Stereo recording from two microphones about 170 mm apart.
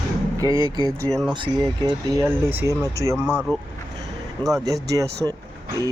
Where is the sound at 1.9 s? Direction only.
20° right (ahead or behind).